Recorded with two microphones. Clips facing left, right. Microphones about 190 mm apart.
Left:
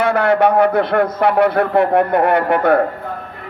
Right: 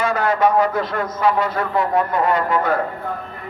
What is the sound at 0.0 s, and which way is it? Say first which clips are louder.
A man's voice: left 4 dB; 60° left (ahead or behind).